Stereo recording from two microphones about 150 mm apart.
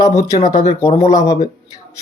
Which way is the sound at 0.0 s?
20° left (ahead or behind).